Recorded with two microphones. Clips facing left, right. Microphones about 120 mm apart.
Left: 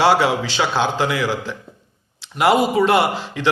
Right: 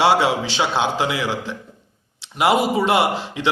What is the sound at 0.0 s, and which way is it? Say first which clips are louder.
A man's voice: left 1 dB; 25° right (ahead or behind).